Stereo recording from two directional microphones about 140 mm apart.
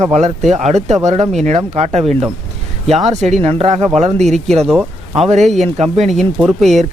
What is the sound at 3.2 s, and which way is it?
Speech, 50° right (ahead or behind).